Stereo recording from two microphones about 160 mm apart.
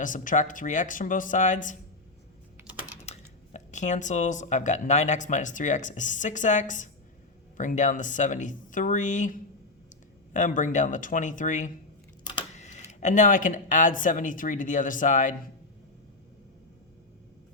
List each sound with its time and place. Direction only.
0.0 s speech: 55° left (ahead or behind)
3.1 s speech: 50° left (ahead or behind)
12.2 s a sound: 30° left (ahead or behind)
12.5 s speech: 45° left (ahead or behind)